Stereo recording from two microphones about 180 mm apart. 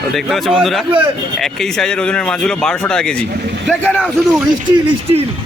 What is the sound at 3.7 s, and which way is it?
Speech, 5° right (ahead or behind).